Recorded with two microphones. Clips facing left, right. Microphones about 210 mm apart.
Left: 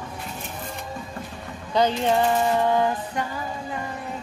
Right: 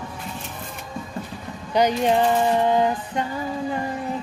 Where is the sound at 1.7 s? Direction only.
15° right (ahead or behind).